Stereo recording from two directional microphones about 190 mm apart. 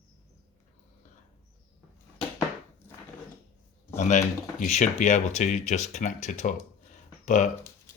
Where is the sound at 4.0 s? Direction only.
40° left (ahead or behind).